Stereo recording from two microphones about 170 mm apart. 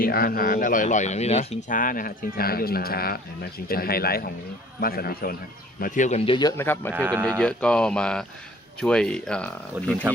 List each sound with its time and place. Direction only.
0.0 s speech: 60° left (ahead or behind)
5.8 s speech: 50° left (ahead or behind); by 6.5 s 30° left (ahead or behind)
6.6 s speech: 15° left (ahead or behind)
9.8 s speech: 10° right (ahead or behind)